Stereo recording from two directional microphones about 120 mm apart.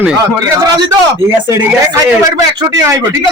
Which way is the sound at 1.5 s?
20° right (ahead or behind).